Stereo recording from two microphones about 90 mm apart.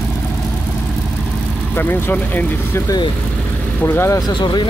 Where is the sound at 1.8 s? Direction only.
25° left (ahead or behind).